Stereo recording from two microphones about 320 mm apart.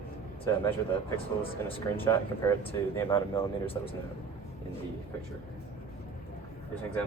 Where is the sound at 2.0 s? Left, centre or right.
Centre.